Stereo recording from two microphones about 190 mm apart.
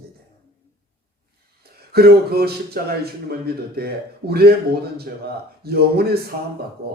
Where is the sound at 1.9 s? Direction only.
55° right (ahead or behind).